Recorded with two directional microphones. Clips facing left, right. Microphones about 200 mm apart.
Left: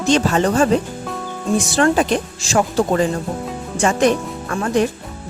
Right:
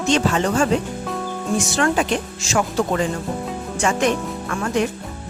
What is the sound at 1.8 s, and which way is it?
Speech, 35° left (ahead or behind).